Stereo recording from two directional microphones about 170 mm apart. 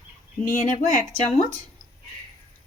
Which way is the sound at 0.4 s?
50° left (ahead or behind).